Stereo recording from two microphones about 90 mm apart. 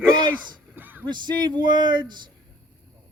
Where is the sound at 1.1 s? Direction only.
55° right (ahead or behind).